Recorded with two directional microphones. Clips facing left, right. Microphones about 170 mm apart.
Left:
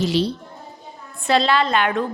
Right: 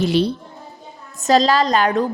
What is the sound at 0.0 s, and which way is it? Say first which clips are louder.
Speech: right 3 dB; 55° right (ahead or behind).